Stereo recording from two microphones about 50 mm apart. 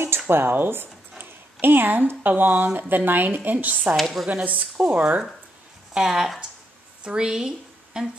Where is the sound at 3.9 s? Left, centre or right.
Centre.